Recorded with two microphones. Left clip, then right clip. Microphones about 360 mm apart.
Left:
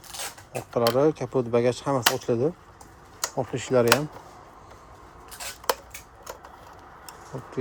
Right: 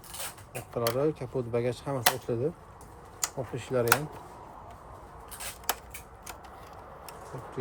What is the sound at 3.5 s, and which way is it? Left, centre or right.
Speech, centre.